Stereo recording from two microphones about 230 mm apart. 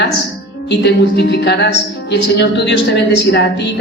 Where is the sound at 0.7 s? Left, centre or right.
Left.